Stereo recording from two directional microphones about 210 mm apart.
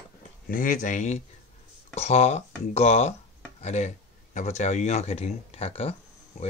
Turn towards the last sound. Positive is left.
turn(degrees=30)  # may be behind; listen again after turning